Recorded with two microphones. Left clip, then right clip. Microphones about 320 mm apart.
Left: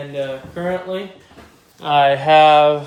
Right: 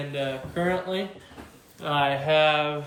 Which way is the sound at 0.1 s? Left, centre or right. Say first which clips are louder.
Left 6 dB; centre.